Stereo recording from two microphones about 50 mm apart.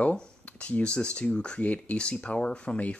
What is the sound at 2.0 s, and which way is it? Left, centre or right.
Speech, centre.